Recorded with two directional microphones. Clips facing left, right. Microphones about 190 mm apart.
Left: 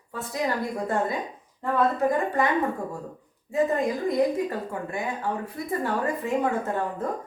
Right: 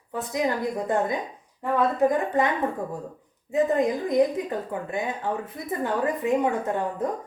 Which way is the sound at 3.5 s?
20° right (ahead or behind).